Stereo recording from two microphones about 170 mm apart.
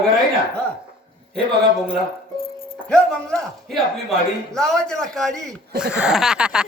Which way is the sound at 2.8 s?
5° left (ahead or behind).